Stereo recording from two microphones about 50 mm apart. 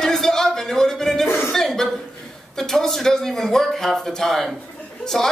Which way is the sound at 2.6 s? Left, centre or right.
Centre.